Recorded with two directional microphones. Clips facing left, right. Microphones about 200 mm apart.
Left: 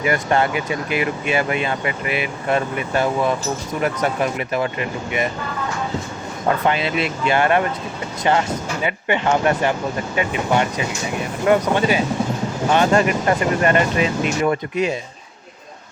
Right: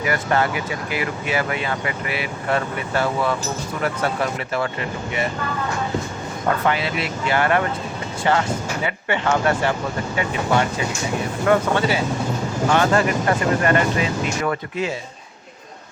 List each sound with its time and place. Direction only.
0.0 s speech: 25° left (ahead or behind)
6.7 s speech: 20° left (ahead or behind)